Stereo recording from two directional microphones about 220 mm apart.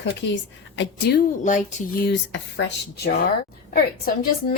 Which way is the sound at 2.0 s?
55° left (ahead or behind).